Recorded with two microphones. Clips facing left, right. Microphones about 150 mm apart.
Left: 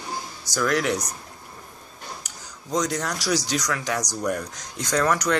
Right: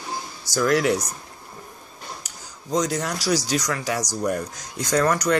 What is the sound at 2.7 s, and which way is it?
Speech, 5° right (ahead or behind).